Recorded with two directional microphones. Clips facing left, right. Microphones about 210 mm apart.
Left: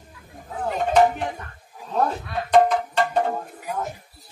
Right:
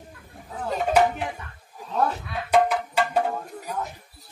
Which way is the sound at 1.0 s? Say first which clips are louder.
Left 3 dB; 5° right (ahead or behind).